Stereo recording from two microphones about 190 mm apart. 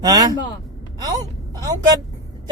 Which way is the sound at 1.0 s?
20° right (ahead or behind).